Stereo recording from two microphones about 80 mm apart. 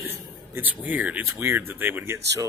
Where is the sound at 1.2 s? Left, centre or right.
Right.